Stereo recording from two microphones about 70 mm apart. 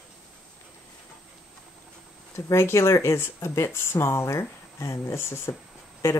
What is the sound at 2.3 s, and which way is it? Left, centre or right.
Speech, left.